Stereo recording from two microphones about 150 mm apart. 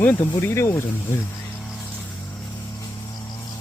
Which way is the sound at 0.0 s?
15° left (ahead or behind).